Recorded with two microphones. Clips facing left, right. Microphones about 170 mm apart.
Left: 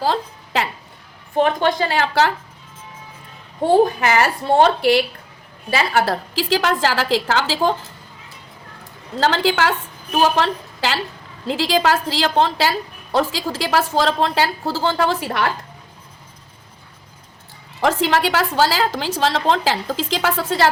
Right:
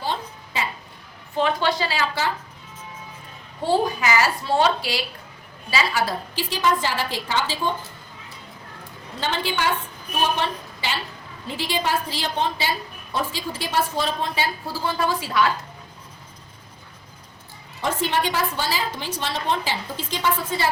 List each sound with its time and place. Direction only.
0.0 s a sound: 85° left
1.4 s a woman's voice: 50° left (ahead or behind); by 2.3 s 65° left (ahead or behind)
3.6 s a woman's voice: 55° left (ahead or behind); by 7.8 s 90° left
9.2 s a woman's voice: 90° left; by 15.5 s 60° left (ahead or behind)
17.7 s a woman's voice: 90° left